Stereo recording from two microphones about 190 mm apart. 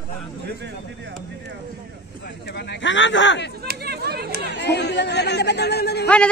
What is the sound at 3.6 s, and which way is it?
Chatter, 55° right (ahead or behind).